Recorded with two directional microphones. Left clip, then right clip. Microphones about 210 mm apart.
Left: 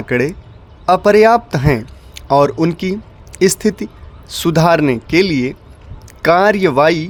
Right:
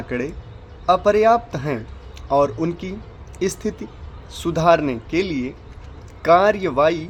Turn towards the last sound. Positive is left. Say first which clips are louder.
# left 6 dB
turn(degrees=55)  # may be behind; listen again after turning